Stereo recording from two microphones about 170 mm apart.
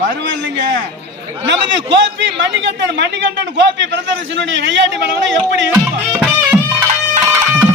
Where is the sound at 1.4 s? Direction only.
90° right.